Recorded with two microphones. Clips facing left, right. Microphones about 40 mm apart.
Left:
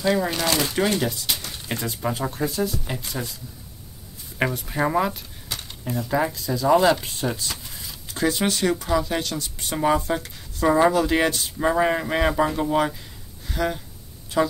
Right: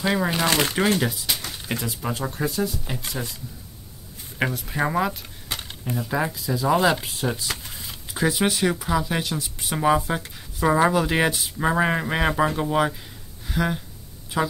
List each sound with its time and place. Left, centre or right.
0.0 s speech: centre
1.1 s speech: centre
4.4 s speech: centre
5.5 s a sound: right
5.9 s speech: centre
13.5 s a sound: centre
14.3 s speech: centre